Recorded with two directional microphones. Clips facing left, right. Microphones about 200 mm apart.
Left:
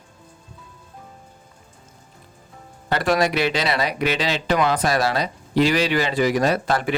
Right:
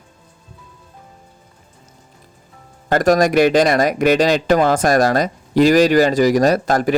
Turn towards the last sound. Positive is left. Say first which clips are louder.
# right 6 dB
turn(degrees=-40)  # may be behind; listen again after turning